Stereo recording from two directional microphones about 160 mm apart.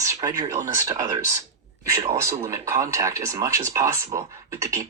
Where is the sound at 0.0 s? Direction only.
20° right (ahead or behind).